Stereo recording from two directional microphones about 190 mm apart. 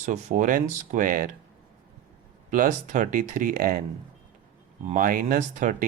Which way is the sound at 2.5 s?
45° right (ahead or behind).